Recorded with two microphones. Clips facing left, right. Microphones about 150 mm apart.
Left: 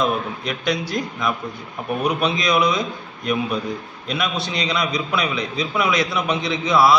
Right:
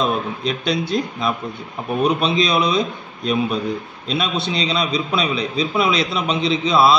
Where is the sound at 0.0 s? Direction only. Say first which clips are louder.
Right 1 dB; 30° right (ahead or behind).